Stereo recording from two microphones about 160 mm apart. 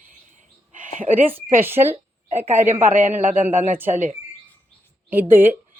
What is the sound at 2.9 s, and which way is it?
Speech, 50° right (ahead or behind).